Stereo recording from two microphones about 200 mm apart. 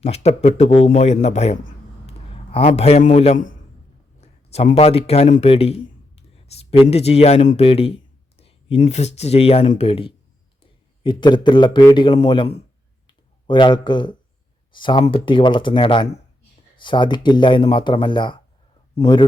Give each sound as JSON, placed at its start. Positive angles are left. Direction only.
{"t": 0.0, "sound": "a man's voice", "side_deg": 30}
{"t": 13.1, "sound": "clicking", "side_deg": 25}
{"t": 13.8, "sound": "speech", "side_deg": 20}